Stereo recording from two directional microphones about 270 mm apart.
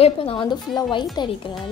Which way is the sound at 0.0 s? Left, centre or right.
Left.